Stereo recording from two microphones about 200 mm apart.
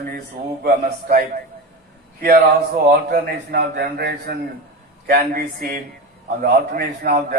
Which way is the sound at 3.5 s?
55° right (ahead or behind).